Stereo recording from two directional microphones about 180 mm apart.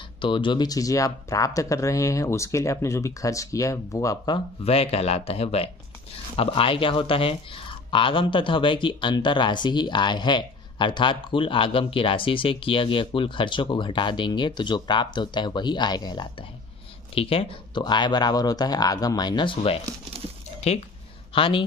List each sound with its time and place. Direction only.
0.2 s speech: 25° left (ahead or behind)
4.6 s speech: 35° left (ahead or behind)